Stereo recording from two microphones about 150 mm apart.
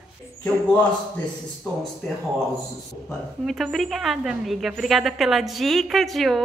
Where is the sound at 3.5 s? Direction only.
Centre (ahead or behind).